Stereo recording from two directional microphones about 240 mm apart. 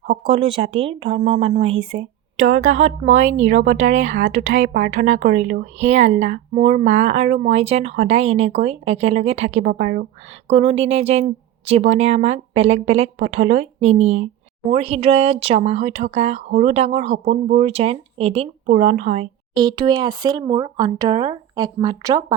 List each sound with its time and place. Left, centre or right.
0.1 s speech: right
10.5 s speech: right